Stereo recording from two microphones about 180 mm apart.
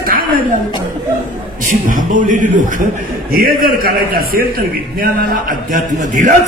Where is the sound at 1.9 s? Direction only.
45° right (ahead or behind).